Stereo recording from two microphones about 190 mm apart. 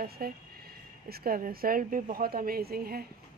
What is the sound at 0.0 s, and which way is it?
Speech, 50° right (ahead or behind).